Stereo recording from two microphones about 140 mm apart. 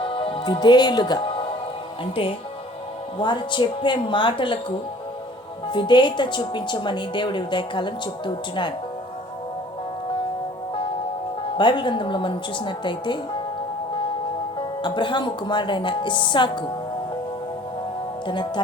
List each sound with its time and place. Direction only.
0.0 s music: 40° left (ahead or behind)
3.2 s speech: 35° left (ahead or behind)
5.6 s speech: 35° left (ahead or behind)
11.5 s speech: 35° left (ahead or behind)
14.8 s speech: 35° left (ahead or behind)
18.3 s speech: 35° left (ahead or behind)